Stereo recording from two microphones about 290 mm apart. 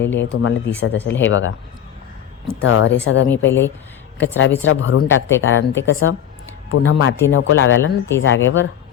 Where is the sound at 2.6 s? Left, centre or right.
Left.